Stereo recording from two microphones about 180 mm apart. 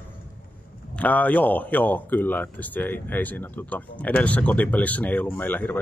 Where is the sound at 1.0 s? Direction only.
10° left (ahead or behind).